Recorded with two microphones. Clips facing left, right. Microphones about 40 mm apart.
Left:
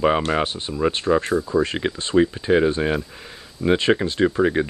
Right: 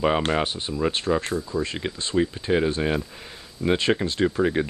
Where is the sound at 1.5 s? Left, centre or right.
Centre.